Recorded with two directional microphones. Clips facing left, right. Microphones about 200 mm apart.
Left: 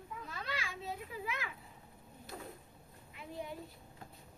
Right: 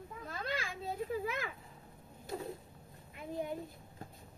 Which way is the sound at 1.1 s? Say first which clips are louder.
Right 5 dB; 45° right (ahead or behind).